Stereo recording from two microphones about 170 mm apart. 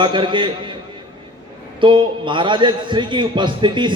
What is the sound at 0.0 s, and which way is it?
Speech, 30° right (ahead or behind).